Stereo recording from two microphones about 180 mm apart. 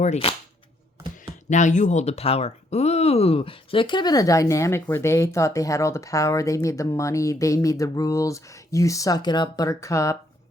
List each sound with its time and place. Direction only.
0.0 s speech: 35° left (ahead or behind)
1.5 s speech: 40° left (ahead or behind); by 10.2 s 15° left (ahead or behind)